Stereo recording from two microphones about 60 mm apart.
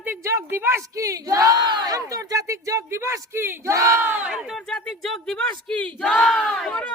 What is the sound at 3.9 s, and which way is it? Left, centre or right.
Speech, right.